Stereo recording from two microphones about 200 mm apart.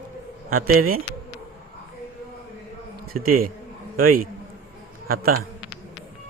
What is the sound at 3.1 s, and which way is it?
A man's voice, 45° right (ahead or behind).